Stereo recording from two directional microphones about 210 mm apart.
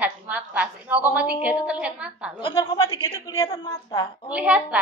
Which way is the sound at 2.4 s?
25° left (ahead or behind).